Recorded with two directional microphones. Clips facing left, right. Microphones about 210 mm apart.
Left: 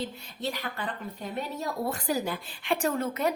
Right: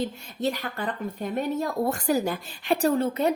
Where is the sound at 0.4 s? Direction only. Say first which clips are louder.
Right 5 dB; 45° right (ahead or behind).